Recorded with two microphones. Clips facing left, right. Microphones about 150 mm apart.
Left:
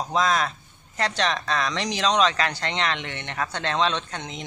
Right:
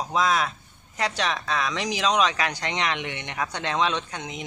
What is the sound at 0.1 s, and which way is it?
Speech, 10° right (ahead or behind).